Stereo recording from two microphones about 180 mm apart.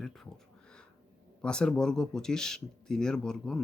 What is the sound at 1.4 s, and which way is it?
Speech, 5° left (ahead or behind).